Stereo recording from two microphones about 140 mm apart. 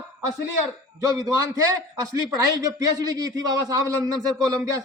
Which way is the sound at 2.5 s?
25° right (ahead or behind).